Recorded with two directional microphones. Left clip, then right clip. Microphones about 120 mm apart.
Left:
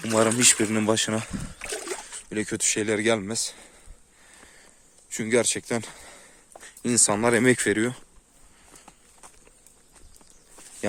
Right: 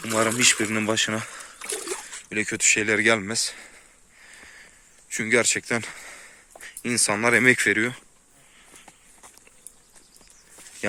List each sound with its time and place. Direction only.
0.0 s speech: 45° left (ahead or behind)
2.9 s speech: 15° left (ahead or behind)
4.4 s a sound: 30° left (ahead or behind)
6.6 s speech: 50° left (ahead or behind)